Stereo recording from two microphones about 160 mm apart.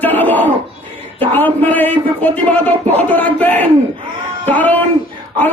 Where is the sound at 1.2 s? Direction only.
10° left (ahead or behind).